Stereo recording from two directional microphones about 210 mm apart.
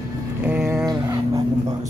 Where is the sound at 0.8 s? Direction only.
15° right (ahead or behind).